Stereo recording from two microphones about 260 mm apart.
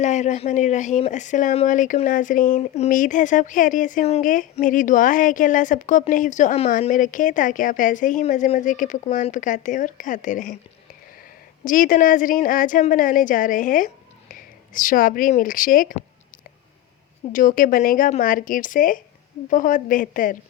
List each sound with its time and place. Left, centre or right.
0.0 s speech: left
11.6 s a woman's voice: left
17.3 s a woman's voice: left